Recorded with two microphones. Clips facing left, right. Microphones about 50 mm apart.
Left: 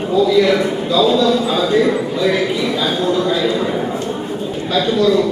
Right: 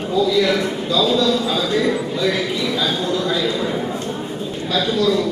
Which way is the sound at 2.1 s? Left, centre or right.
Centre.